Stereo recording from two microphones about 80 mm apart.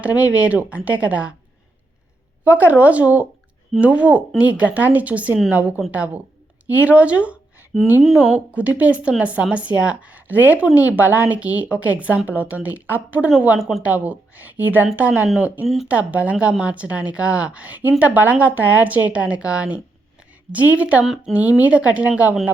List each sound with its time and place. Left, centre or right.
0.0 s a woman's voice: centre
2.4 s a woman's voice: right
7.7 s speech: centre
8.5 s a woman's voice: centre
13.6 s speech: centre
13.8 s a woman's voice: centre
15.6 s speech: centre
15.9 s a woman's voice: centre
21.0 s speech: centre
21.6 s a woman's voice: centre